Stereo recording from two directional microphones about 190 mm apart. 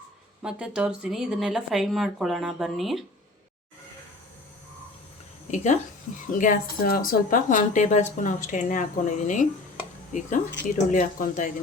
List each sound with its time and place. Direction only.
0.4 s speech: 5° right (ahead or behind)
5.5 s speech: 40° left (ahead or behind)